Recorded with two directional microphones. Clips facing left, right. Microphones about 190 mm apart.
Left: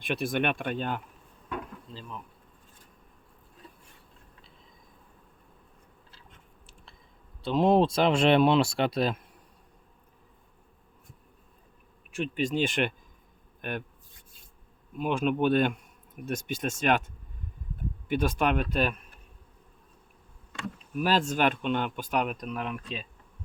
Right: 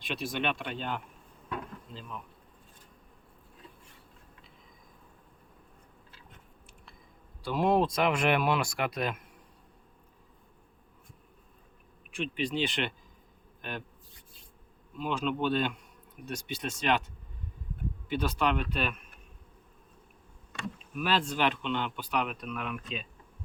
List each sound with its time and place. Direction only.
0.0 s speech: 55° left (ahead or behind)
7.4 s speech: 25° left (ahead or behind)
12.1 s speech: 45° left (ahead or behind)
13.6 s a sound: 55° left (ahead or behind)
14.9 s speech: 50° left (ahead or behind)
18.1 s speech: 50° left (ahead or behind)
21.0 s speech: 45° left (ahead or behind)